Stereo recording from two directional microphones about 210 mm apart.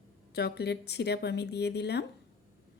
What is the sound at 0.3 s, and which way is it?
Speech, 50° left (ahead or behind).